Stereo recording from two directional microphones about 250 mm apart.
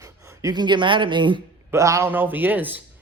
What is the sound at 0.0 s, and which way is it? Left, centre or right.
A man's voice, centre.